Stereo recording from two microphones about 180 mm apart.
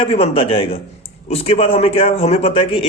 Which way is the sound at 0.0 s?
30° left (ahead or behind).